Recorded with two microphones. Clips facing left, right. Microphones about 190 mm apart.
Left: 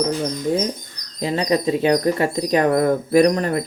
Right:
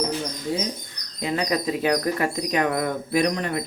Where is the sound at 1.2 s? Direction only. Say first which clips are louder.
Left 5 dB; 30° left (ahead or behind).